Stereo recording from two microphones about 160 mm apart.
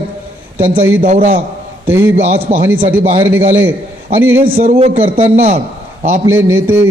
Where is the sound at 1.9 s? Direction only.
15° right (ahead or behind).